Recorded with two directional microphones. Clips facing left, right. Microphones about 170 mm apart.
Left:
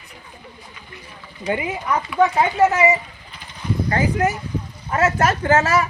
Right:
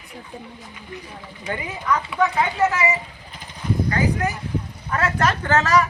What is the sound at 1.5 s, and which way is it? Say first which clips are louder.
Speech: left 2 dB; 25° left (ahead or behind).